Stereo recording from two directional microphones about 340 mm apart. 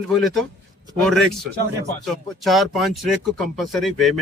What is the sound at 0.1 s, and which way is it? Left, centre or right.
Speech, centre.